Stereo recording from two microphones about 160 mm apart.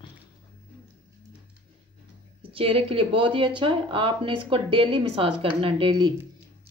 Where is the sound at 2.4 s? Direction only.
35° right (ahead or behind).